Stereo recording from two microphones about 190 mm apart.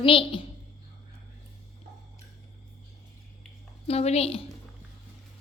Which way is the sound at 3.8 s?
35° left (ahead or behind).